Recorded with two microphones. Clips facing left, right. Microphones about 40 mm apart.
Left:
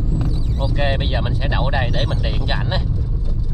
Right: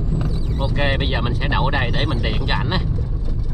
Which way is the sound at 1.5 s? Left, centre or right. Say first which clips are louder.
Right 1 dB; centre.